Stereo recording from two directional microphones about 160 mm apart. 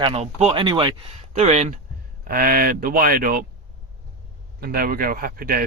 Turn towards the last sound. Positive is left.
turn(degrees=-65)  # may be behind; listen again after turning